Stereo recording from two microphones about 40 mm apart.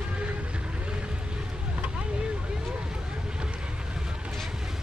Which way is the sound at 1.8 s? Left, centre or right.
Right.